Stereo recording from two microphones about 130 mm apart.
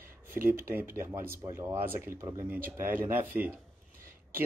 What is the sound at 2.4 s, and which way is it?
Speech, 15° right (ahead or behind).